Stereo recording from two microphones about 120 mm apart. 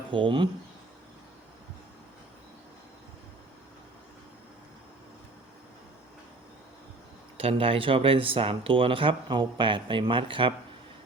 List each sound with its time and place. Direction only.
0.1 s speech: 45° right (ahead or behind)
7.3 s speech: 50° right (ahead or behind)